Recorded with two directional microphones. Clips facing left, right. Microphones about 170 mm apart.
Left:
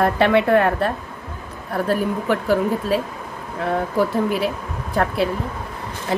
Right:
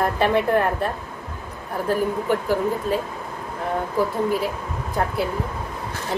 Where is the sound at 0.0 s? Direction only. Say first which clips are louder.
Left 3 dB; 75° left (ahead or behind).